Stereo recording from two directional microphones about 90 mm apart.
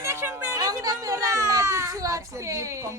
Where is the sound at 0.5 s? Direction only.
45° right (ahead or behind).